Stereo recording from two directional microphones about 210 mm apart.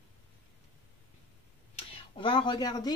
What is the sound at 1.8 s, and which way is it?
Speech, 25° left (ahead or behind).